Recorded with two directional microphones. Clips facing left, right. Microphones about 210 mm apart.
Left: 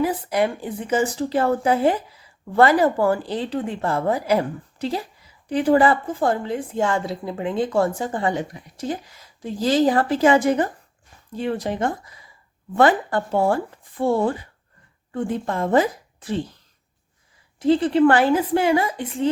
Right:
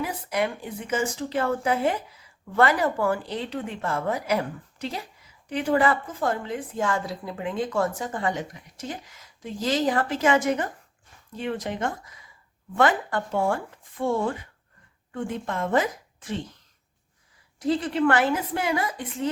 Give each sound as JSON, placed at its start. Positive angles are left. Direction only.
{"t": 0.0, "sound": "a woman's voice", "side_deg": 30}
{"t": 17.6, "sound": "a woman's voice", "side_deg": 30}